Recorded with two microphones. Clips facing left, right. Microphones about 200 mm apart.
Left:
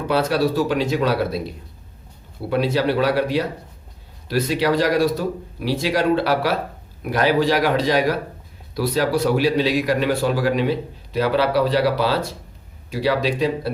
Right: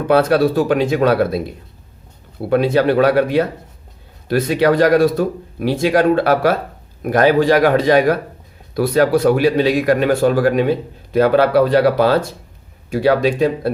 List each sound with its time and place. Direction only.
0.1 s speech: 55° right (ahead or behind)